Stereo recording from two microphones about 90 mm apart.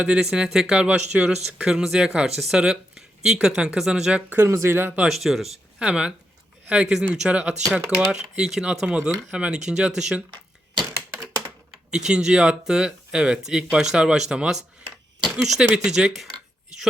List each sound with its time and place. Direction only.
0.0 s speech: 10° right (ahead or behind)
4.4 s speech: 30° right (ahead or behind)
5.0 s speech: centre (ahead or behind)
8.9 s speech: 15° right (ahead or behind)
10.8 s typewriter: 30° right (ahead or behind)
11.9 s speech: 5° right (ahead or behind)